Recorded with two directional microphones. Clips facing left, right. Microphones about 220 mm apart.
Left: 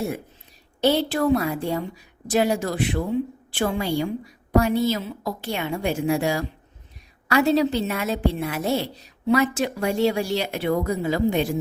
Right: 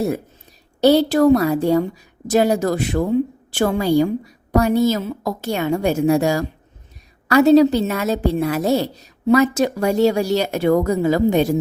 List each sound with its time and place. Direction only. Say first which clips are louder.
0.8 s a woman's voice: right 7 dB; 40° right (ahead or behind)